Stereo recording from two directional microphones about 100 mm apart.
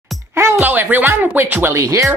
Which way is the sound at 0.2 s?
25° right (ahead or behind).